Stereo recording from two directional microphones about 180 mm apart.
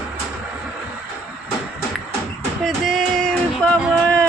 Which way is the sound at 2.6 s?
Centre (ahead or behind).